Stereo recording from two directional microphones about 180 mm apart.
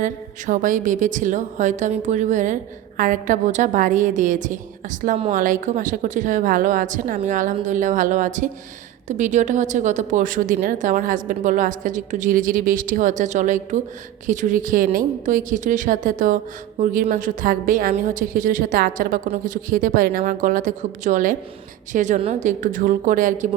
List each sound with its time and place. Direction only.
0.0 s a woman's voice: 45° right (ahead or behind)